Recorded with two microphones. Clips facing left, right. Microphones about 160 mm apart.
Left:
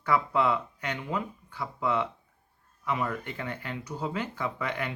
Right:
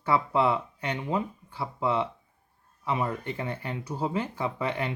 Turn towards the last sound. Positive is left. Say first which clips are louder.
# right 3 dB
turn(degrees=-30)  # may be behind; listen again after turning